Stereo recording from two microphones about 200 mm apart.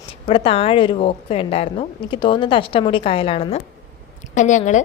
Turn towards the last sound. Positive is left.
turn(degrees=35)  # may be behind; listen again after turning